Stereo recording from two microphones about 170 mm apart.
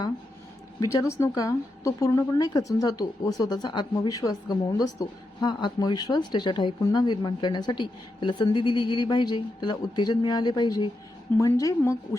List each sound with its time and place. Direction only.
0.9 s a woman's voice: 20° left (ahead or behind)